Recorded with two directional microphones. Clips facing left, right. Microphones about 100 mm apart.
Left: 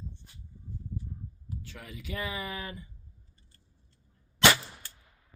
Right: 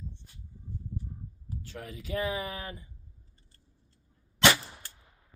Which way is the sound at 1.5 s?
40° right (ahead or behind).